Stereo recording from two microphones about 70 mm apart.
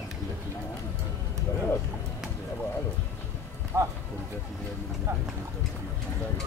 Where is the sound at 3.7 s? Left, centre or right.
Right.